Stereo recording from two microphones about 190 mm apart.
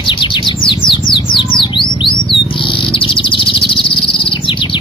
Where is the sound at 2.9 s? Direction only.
25° left (ahead or behind).